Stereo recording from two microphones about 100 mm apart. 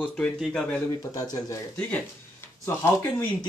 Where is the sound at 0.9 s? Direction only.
35° left (ahead or behind).